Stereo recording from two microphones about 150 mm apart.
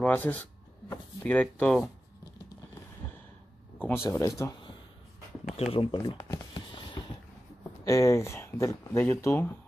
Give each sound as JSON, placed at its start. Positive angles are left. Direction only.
{"t": 0.0, "sound": "speech", "side_deg": 10}
{"t": 3.8, "sound": "speech", "side_deg": 15}
{"t": 5.6, "sound": "speech", "side_deg": 35}
{"t": 6.5, "sound": "a sound", "side_deg": 35}
{"t": 7.8, "sound": "speech", "side_deg": 20}